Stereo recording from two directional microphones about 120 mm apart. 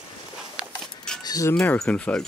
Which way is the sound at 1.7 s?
10° left (ahead or behind).